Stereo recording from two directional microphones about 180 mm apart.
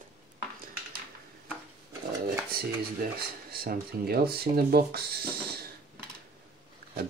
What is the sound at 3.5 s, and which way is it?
Speech, 55° right (ahead or behind).